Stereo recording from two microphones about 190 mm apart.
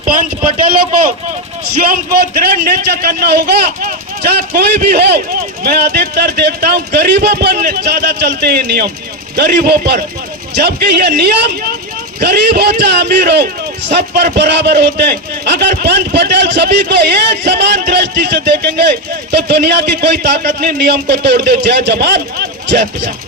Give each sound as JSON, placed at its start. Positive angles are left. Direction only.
{"t": 1.6, "sound": "a man's voice", "side_deg": -55}